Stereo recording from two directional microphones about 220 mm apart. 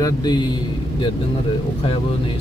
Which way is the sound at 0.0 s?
20° left (ahead or behind).